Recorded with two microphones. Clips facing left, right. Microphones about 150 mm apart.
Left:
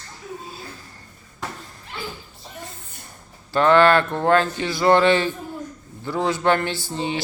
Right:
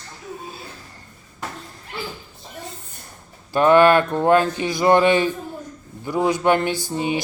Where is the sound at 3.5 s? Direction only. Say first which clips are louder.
Right 2 dB; 15° right (ahead or behind).